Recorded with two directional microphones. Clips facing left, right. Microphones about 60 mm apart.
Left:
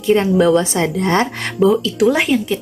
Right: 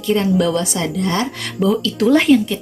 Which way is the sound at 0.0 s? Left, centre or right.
Left.